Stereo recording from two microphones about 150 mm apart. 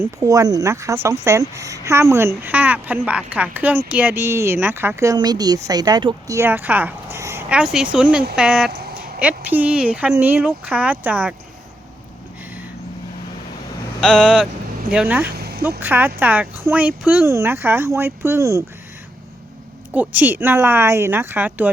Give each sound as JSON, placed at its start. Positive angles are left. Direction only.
{"t": 0.2, "sound": "a woman's voice", "side_deg": -25}
{"t": 6.3, "sound": "a woman's voice", "side_deg": -15}
{"t": 7.5, "sound": "speech", "side_deg": -5}
{"t": 8.7, "sound": "a sound", "side_deg": -90}
{"t": 9.2, "sound": "speech", "side_deg": -10}
{"t": 14.0, "sound": "speech", "side_deg": -5}
{"t": 15.2, "sound": "a sound", "side_deg": -90}
{"t": 15.8, "sound": "speech", "side_deg": -10}
{"t": 19.9, "sound": "speech", "side_deg": -10}